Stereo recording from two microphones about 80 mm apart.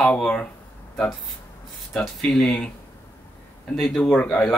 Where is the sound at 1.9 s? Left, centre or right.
Centre.